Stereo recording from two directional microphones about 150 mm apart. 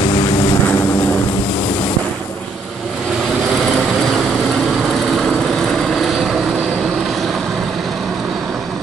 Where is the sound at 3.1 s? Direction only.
Centre (ahead or behind).